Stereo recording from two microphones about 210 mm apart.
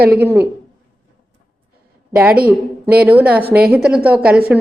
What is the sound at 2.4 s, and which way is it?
A woman's voice, 5° right (ahead or behind).